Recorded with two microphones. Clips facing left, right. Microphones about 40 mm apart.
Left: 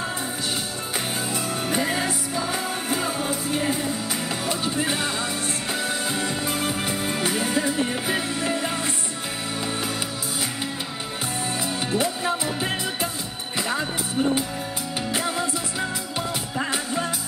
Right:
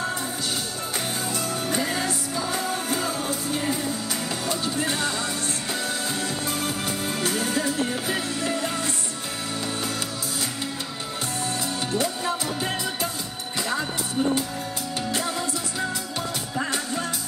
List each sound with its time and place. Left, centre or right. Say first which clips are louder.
0.9 s music: left 1 dB; centre
11.9 s music: left 2 dB; centre
15.1 s music: left 3 dB; centre
16.5 s music: left 1 dB; centre